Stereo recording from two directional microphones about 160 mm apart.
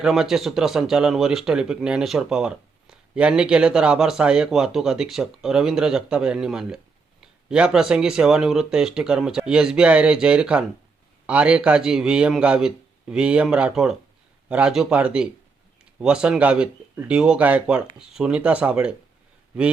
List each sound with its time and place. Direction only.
0.0 s speech: 5° right (ahead or behind)